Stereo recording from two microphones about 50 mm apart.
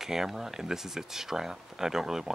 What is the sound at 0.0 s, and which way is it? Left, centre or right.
Speech, centre.